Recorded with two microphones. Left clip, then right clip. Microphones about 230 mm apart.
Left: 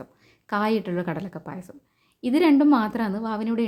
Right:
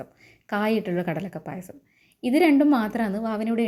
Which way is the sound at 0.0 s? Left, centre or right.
Centre.